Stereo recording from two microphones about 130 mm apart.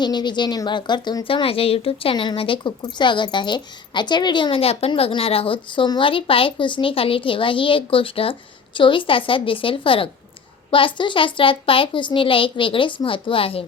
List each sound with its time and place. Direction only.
0.0 s speech: 35° left (ahead or behind)